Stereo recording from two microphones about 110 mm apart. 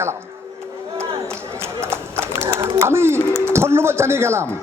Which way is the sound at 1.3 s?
25° right (ahead or behind).